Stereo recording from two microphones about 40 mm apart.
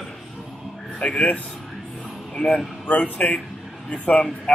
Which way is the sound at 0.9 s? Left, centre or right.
Left.